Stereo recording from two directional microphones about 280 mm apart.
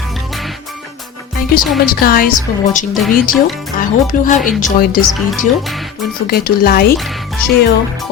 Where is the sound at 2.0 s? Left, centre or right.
Left.